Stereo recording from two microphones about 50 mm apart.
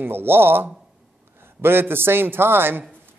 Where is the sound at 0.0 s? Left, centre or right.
Right.